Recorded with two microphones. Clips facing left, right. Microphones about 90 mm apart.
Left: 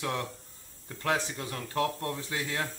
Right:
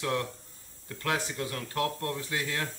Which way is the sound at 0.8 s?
25° left (ahead or behind).